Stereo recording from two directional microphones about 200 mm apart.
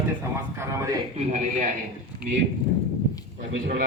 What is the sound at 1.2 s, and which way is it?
Speech, 35° right (ahead or behind).